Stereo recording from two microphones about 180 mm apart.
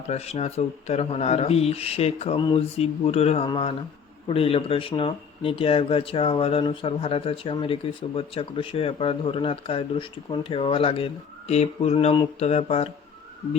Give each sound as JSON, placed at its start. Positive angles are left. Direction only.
{"t": 0.1, "sound": "speech", "side_deg": 35}